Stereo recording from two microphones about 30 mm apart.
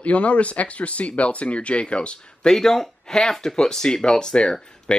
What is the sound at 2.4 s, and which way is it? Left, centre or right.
Speech, centre.